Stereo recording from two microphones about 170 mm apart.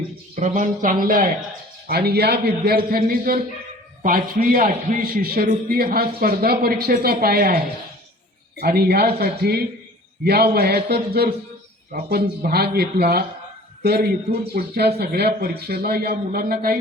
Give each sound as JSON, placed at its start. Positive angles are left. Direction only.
{"t": 0.3, "sound": "speech", "side_deg": -50}
{"t": 1.9, "sound": "speech", "side_deg": -65}